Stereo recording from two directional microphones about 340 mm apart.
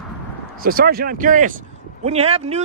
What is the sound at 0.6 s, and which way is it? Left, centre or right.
Speech, right.